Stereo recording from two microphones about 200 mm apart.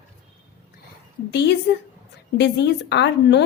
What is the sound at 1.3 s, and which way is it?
A woman's voice, 60° left (ahead or behind).